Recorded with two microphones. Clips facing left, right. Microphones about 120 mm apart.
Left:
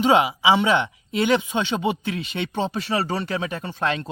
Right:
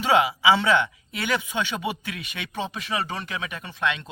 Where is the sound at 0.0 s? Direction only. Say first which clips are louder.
Left 2 dB; 20° left (ahead or behind).